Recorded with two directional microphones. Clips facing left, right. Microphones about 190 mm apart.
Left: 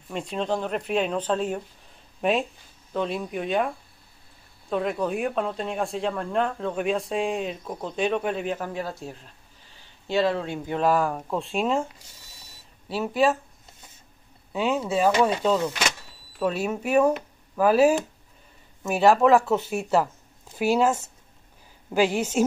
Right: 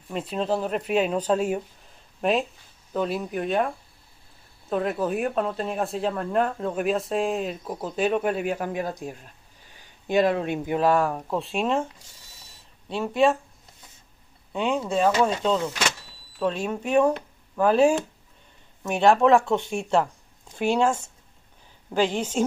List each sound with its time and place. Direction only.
0.1 s speech: 5° right (ahead or behind)
10.8 s speech: centre (ahead or behind)
14.5 s speech: 5° left (ahead or behind)